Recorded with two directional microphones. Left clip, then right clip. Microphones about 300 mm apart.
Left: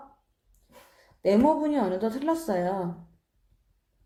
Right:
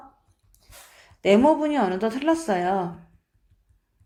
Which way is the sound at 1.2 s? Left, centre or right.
Centre.